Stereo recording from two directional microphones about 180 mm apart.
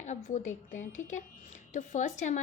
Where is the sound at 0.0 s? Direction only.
40° left (ahead or behind).